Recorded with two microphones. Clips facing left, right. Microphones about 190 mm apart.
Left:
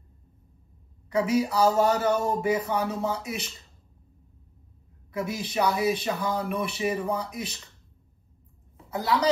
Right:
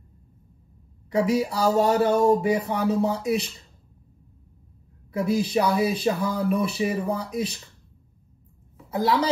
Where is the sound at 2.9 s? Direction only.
30° right (ahead or behind).